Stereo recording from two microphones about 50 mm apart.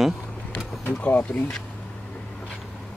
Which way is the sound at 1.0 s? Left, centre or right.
Left.